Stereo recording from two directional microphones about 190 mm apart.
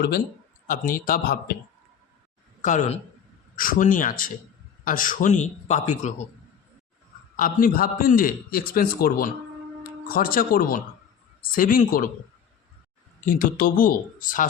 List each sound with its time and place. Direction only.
0.7 s a man's voice: 45° left (ahead or behind)
2.6 s a man's voice: 40° left (ahead or behind)
7.3 s a man's voice: 50° left (ahead or behind)
13.2 s a man's voice: 45° left (ahead or behind)